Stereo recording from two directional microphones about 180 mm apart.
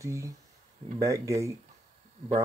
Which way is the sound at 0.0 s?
15° right (ahead or behind).